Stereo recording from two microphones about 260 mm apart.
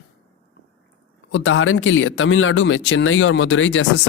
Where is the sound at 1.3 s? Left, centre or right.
Left.